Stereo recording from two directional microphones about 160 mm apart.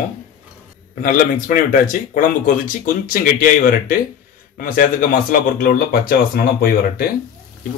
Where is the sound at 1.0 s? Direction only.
60° left (ahead or behind).